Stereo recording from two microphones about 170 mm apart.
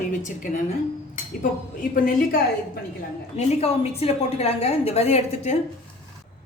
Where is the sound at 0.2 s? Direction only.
50° left (ahead or behind).